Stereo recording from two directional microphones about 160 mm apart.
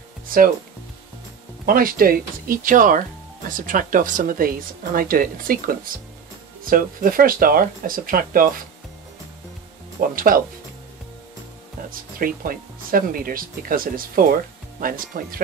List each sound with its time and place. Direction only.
1.7 s speech: 65° right (ahead or behind)
9.9 s speech: 60° right (ahead or behind)
11.9 s speech: 60° right (ahead or behind)